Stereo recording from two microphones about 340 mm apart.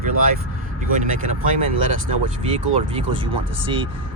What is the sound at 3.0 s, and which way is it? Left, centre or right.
Speech, right.